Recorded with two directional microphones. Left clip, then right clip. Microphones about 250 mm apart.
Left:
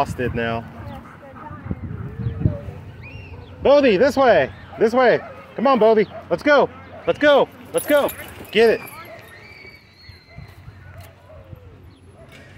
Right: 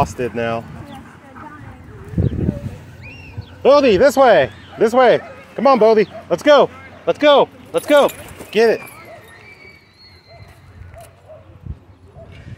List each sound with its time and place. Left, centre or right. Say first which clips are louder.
0.0 s speech: right 3 dB; centre
3.6 s speech: right 3 dB; centre